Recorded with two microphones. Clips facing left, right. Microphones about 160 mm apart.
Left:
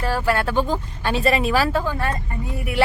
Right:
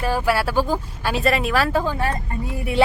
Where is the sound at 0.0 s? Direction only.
10° right (ahead or behind).